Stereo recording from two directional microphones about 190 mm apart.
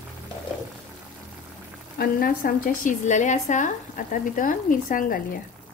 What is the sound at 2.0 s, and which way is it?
A woman's voice, 50° left (ahead or behind).